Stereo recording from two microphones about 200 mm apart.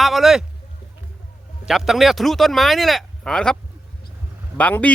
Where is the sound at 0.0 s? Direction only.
Centre (ahead or behind).